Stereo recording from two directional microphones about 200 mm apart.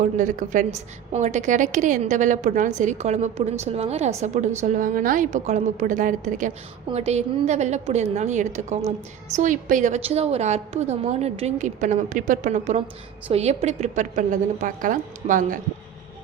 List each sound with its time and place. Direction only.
0.0 s a woman's voice: 40° right (ahead or behind)